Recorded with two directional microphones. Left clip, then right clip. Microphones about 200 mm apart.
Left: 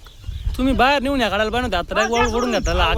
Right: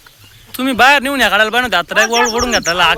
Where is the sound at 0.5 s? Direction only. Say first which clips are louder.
Right 7 dB; centre (ahead or behind).